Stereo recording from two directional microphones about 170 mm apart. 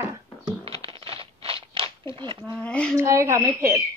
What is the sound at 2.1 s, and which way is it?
Speech, 30° right (ahead or behind).